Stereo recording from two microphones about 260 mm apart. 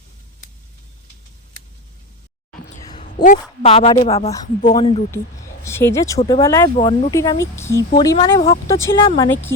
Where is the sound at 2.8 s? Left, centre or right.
Centre.